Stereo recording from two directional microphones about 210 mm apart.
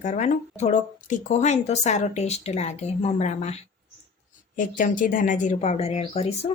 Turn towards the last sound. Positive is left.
turn(degrees=30)  # may be behind; listen again after turning